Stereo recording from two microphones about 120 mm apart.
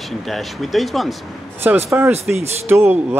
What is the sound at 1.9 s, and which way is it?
Speech, 20° right (ahead or behind).